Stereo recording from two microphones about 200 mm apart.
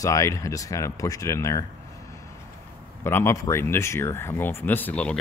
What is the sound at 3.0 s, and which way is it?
Speech, 10° left (ahead or behind).